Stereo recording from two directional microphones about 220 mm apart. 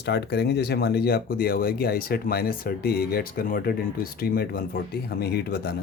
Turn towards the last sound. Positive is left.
turn(degrees=45)  # may be behind; listen again after turning